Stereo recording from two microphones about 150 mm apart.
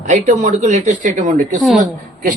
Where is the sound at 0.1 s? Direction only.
55° right (ahead or behind).